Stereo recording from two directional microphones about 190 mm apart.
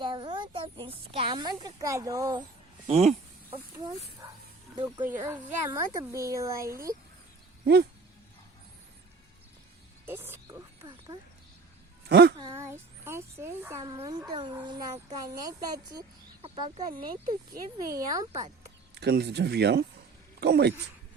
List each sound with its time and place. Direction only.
0.0 s speech: 25° right (ahead or behind)
2.8 s speech: 35° right (ahead or behind)
4.2 s bow-wow: 20° right (ahead or behind)
5.0 s a woman's voice: 15° right (ahead or behind)
7.6 s speech: 60° right (ahead or behind)
10.1 s speech: 10° right (ahead or behind)
12.0 s speech: 60° right (ahead or behind)
12.4 s child singing: 15° right (ahead or behind)
13.4 s a woman's voice: 15° right (ahead or behind)
18.9 s speech: 60° right (ahead or behind)